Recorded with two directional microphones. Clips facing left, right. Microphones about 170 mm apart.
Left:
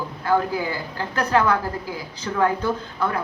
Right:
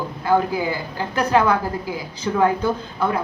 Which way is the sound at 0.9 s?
15° right (ahead or behind).